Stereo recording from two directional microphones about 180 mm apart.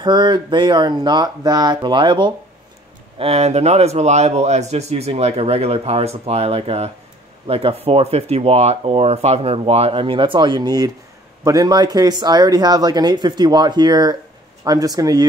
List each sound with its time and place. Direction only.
0.0 s speech: 25° right (ahead or behind)
3.2 s speech: 35° right (ahead or behind); by 15.2 s 20° right (ahead or behind)